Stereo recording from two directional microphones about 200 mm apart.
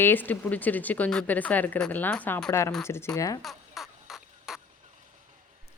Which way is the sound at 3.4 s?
Centre (ahead or behind).